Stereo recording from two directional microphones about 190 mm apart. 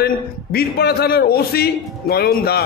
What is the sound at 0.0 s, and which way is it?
A man's voice, 55° left (ahead or behind).